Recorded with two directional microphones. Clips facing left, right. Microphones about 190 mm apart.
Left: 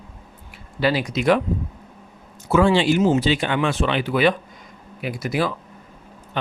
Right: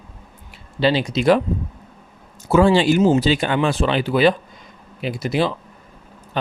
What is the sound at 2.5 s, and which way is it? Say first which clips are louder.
Speech: right 2 dB; 35° right (ahead or behind).